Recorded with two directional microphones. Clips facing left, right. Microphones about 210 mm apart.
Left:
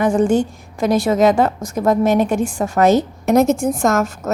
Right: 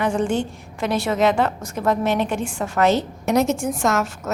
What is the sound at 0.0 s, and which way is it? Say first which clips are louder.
A woman's voice: left 6 dB; 45° left (ahead or behind).